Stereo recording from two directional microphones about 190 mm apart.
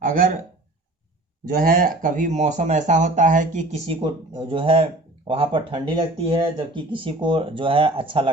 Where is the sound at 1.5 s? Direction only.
45° right (ahead or behind).